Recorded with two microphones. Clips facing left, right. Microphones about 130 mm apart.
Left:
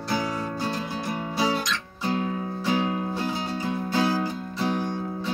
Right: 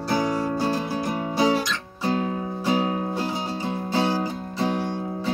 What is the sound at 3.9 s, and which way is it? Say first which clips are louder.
Music: right 1 dB; 25° right (ahead or behind).